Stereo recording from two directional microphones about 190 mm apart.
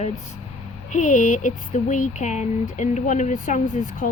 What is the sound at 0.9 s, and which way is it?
Speech, 40° left (ahead or behind).